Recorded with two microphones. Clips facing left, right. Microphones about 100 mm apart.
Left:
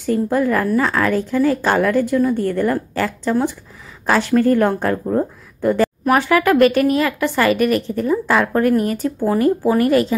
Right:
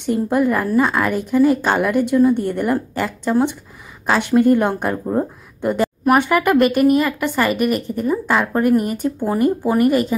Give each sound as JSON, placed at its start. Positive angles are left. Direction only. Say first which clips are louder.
{"t": 0.0, "sound": "a woman's voice", "louder": "even", "side_deg": -20}
{"t": 6.0, "sound": "a woman's voice", "louder": "right 1 dB", "side_deg": -10}